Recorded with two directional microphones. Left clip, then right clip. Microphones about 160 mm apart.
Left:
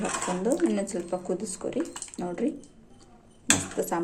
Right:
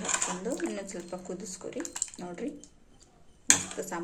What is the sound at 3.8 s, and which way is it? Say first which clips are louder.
Speech: left 8 dB; 5° left (ahead or behind).